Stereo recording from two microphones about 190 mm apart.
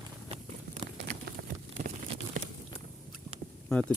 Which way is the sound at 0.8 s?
25° right (ahead or behind).